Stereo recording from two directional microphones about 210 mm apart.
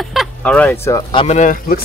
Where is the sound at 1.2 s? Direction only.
35° left (ahead or behind).